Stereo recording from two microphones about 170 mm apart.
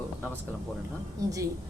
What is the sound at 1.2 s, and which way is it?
Speech, 20° right (ahead or behind).